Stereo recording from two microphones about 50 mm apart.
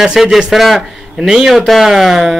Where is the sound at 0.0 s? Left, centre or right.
Centre.